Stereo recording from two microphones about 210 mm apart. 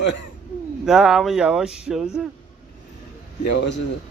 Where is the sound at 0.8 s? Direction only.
Centre (ahead or behind).